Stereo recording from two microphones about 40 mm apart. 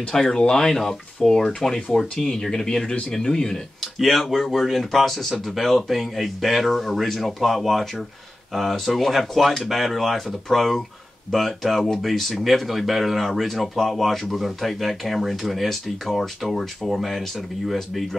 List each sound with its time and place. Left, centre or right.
0.1 s speech: centre
3.8 s speech: centre